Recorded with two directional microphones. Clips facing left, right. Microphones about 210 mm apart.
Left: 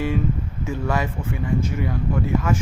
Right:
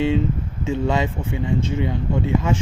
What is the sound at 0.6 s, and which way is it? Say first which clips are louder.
Speech: right 4 dB; 25° right (ahead or behind).